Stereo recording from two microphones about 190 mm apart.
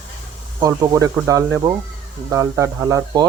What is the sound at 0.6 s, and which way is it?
Speech, 20° right (ahead or behind).